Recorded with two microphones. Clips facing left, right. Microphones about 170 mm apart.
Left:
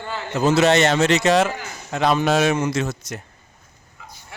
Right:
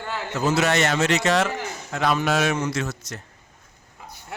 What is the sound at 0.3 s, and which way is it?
A man's voice, 25° left (ahead or behind).